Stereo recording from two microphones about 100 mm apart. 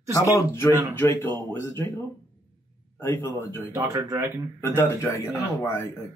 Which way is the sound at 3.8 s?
35° right (ahead or behind).